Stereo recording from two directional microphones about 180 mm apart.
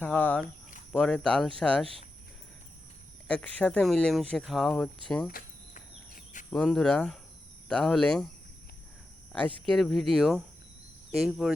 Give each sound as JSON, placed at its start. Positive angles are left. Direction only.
{"t": 0.0, "sound": "speech", "side_deg": 10}
{"t": 3.2, "sound": "speech", "side_deg": 5}
{"t": 5.3, "sound": "insect", "side_deg": 45}
{"t": 6.5, "sound": "speech", "side_deg": 5}
{"t": 9.3, "sound": "speech", "side_deg": 5}